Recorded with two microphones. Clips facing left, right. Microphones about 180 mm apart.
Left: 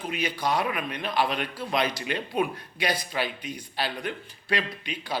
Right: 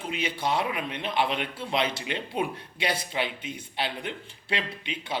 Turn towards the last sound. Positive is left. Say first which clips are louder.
# left 1 dB
turn(degrees=-25)  # may be behind; listen again after turning